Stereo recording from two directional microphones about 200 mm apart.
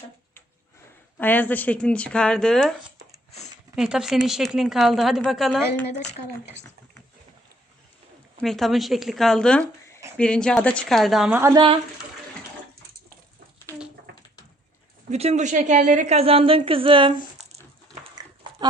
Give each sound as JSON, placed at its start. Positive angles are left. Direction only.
{"t": 1.2, "sound": "speech", "side_deg": 10}
{"t": 3.8, "sound": "speech", "side_deg": -5}
{"t": 8.4, "sound": "speech", "side_deg": 0}
{"t": 15.1, "sound": "a woman's voice", "side_deg": -35}